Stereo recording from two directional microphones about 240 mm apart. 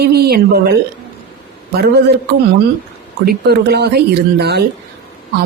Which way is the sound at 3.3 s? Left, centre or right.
Right.